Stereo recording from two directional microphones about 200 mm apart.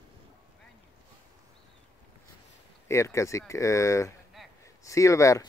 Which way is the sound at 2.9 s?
15° left (ahead or behind).